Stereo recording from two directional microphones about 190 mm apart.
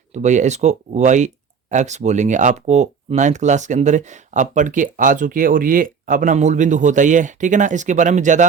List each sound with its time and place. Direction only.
0.1 s speech: 40° right (ahead or behind)